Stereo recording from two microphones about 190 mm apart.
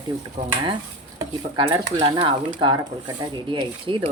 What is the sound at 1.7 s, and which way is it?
Speech, 25° right (ahead or behind).